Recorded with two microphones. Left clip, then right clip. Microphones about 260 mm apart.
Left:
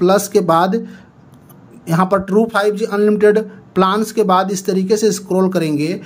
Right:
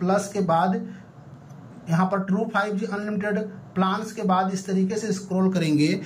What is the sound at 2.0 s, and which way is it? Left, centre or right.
Speech, left.